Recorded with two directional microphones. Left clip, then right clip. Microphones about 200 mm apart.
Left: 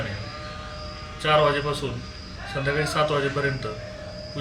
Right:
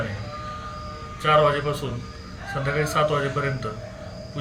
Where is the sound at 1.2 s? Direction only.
5° right (ahead or behind).